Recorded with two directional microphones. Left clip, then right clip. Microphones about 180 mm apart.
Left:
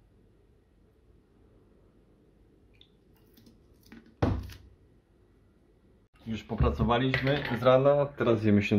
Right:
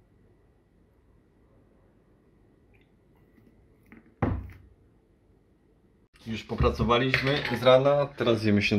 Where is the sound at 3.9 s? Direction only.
50° left (ahead or behind).